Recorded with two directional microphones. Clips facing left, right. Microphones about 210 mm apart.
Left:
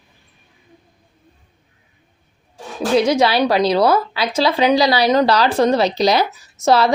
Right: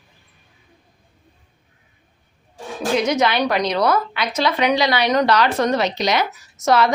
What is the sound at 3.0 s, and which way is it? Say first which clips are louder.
Speech: left 4 dB; 30° left (ahead or behind).